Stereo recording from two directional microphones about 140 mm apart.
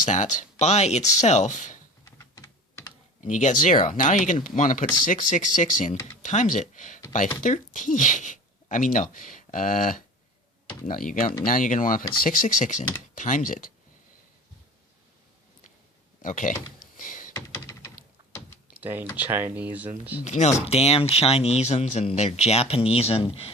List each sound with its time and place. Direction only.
0.0 s speech: 60° left (ahead or behind)
2.0 s typing: 25° left (ahead or behind)
3.2 s speech: 60° left (ahead or behind)
16.2 s speech: 65° left (ahead or behind)
17.0 s a sound: 70° left (ahead or behind)
17.3 s computer keyboard: 25° left (ahead or behind)
18.8 s speech: 15° right (ahead or behind)
20.2 s speech: 55° left (ahead or behind)